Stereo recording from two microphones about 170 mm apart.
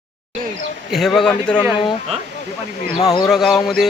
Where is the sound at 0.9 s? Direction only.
Centre (ahead or behind).